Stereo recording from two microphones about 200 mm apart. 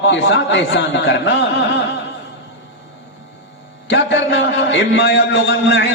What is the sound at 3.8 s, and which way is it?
A man's voice, 60° left (ahead or behind).